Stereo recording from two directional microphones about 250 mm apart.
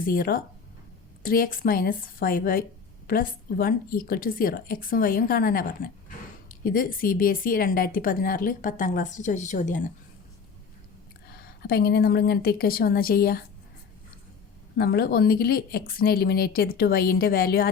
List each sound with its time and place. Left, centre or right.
0.0 s speech: left
11.7 s speech: left
14.8 s speech: left